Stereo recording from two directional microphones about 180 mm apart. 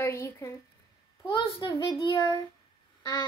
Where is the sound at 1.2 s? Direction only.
30° left (ahead or behind).